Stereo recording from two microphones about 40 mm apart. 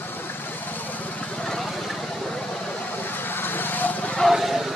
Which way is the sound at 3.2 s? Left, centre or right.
Left.